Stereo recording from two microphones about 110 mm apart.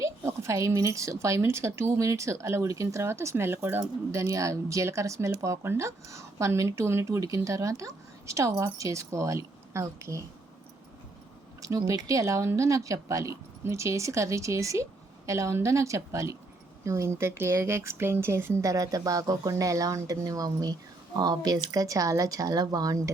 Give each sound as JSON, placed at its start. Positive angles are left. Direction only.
{"t": 0.0, "sound": "speech", "side_deg": -25}
{"t": 11.9, "sound": "speech", "side_deg": -30}